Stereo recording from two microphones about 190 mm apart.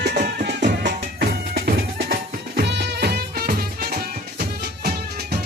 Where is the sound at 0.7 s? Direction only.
60° right (ahead or behind).